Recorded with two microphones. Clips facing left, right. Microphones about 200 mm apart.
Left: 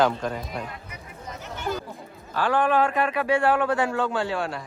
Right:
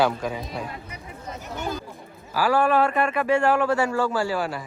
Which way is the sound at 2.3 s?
10° right (ahead or behind).